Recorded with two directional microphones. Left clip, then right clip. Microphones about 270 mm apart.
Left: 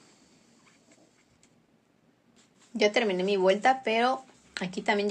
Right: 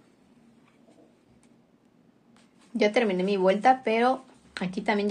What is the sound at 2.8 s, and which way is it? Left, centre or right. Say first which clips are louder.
Speech: right 1 dB; centre.